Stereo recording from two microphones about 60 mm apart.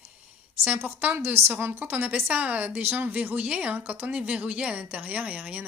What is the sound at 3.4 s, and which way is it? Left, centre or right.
A woman's voice, right.